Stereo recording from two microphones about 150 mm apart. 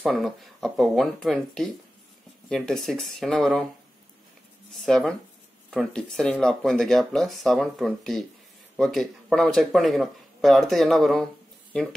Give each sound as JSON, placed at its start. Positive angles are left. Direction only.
{"t": 0.0, "sound": "speech", "side_deg": 0}
{"t": 4.8, "sound": "speech", "side_deg": 5}